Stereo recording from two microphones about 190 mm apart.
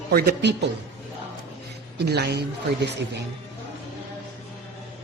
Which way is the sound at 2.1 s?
60° right (ahead or behind).